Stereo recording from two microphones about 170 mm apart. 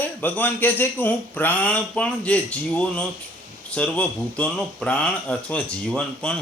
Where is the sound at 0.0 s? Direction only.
10° left (ahead or behind).